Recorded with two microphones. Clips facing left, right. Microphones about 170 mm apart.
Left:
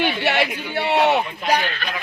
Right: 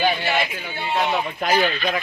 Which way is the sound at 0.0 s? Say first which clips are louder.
Left 1 dB; 70° left (ahead or behind).